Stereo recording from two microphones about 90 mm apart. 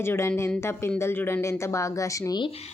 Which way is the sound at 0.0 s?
25° left (ahead or behind).